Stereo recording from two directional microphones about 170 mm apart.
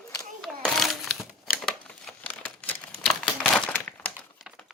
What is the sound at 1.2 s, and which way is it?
Crumpling, 5° left (ahead or behind).